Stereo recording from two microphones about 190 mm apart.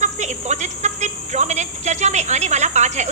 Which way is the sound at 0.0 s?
40° right (ahead or behind).